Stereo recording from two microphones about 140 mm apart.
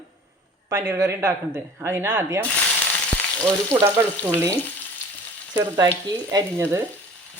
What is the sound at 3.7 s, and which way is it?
Speech, 20° right (ahead or behind).